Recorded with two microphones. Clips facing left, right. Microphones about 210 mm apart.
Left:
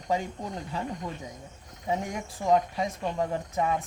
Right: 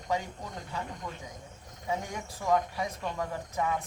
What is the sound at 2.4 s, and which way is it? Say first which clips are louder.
Speech: left 4 dB; 25° left (ahead or behind).